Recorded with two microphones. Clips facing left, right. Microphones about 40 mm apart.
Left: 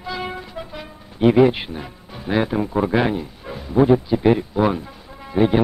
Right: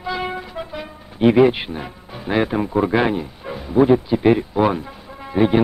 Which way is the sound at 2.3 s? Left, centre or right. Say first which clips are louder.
Right 1 dB; centre.